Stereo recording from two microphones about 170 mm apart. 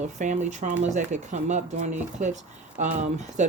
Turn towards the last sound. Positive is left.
turn(degrees=-45)  # may be behind; listen again after turning